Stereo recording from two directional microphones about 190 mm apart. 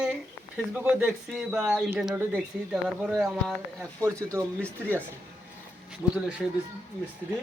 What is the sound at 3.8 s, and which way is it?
Speech, 15° right (ahead or behind).